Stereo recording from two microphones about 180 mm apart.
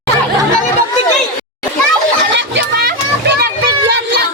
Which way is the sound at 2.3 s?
75° right (ahead or behind).